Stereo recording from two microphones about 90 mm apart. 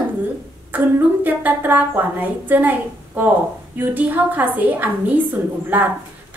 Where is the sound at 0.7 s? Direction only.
20° right (ahead or behind).